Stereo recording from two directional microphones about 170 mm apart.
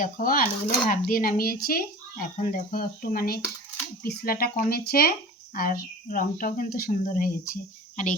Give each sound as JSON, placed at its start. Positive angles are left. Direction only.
{"t": 0.0, "sound": "speech", "side_deg": 55}